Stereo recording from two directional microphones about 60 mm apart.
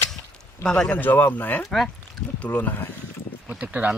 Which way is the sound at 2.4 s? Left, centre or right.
Left.